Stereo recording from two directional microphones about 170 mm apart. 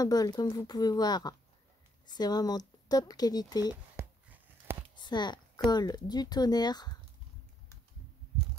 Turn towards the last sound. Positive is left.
turn(degrees=25)  # may be behind; listen again after turning